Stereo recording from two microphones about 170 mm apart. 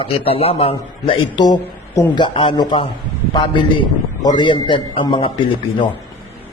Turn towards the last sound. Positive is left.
turn(degrees=30)  # may be behind; listen again after turning